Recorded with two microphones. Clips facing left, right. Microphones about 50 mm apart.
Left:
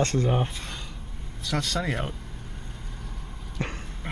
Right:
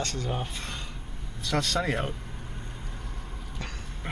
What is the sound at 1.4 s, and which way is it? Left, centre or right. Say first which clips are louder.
Speech: right 1 dB; centre.